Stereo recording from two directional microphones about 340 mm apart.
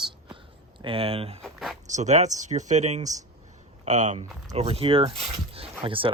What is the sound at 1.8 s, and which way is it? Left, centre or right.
Speech, right.